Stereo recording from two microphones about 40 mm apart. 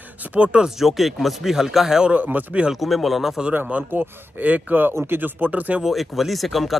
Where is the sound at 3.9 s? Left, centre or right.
Right.